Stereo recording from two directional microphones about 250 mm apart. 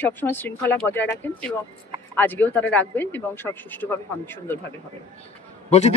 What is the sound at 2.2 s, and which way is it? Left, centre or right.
Speech, centre.